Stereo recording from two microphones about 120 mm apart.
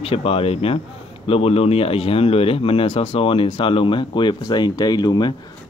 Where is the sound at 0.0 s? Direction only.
55° left (ahead or behind).